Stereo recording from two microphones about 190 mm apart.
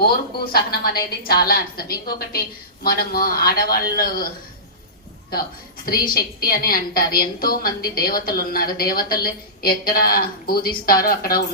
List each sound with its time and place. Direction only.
0.5 s a woman's voice: 55° left (ahead or behind)
5.3 s a woman's voice: 50° left (ahead or behind)